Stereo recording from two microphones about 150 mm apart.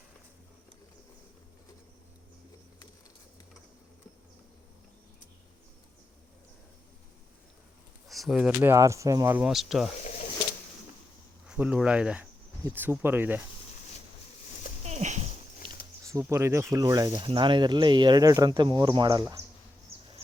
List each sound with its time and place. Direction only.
8.0 s speech: centre (ahead or behind); by 9.5 s 15° right (ahead or behind)
9.5 s speech: centre (ahead or behind)
10.0 s a sound: 50° left (ahead or behind)
11.4 s speech: 5° right (ahead or behind)
14.8 s dog: 50° right (ahead or behind)
16.0 s speech: 20° right (ahead or behind)